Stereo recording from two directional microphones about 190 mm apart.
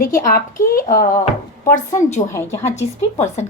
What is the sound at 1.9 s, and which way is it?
Speech, 35° left (ahead or behind).